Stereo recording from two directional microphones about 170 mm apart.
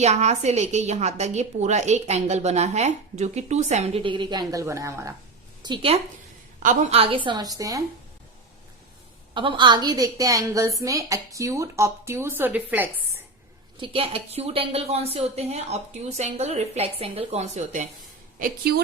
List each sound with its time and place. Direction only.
0.0 s a woman's voice: 40° right (ahead or behind); by 5.1 s 20° right (ahead or behind)
5.6 s a woman's voice: 30° right (ahead or behind)
7.3 s a woman's voice: 20° right (ahead or behind)
9.3 s a woman's voice: 30° right (ahead or behind); by 12.9 s 10° right (ahead or behind)
13.7 s a woman's voice: 30° right (ahead or behind)
18.3 s a woman's voice: 60° right (ahead or behind)